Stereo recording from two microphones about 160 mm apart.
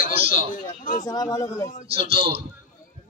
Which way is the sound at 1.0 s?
25° left (ahead or behind).